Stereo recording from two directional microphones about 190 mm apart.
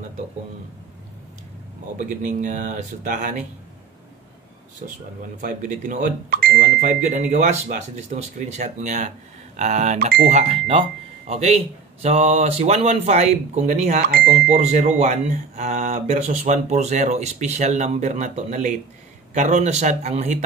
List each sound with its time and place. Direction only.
2.0 s speech: 40° right (ahead or behind)
4.8 s speech: 45° right (ahead or behind)